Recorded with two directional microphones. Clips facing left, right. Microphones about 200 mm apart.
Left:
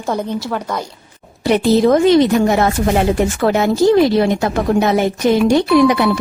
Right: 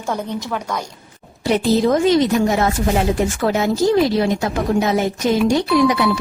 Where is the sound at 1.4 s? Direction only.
60° left (ahead or behind).